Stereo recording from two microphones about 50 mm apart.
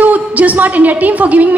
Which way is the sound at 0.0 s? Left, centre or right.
Right.